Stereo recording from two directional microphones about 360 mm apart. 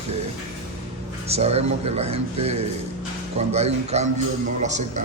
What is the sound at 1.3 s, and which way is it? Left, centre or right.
A man's voice, centre.